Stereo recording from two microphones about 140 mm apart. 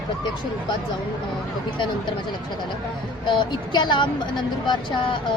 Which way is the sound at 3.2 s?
35° left (ahead or behind).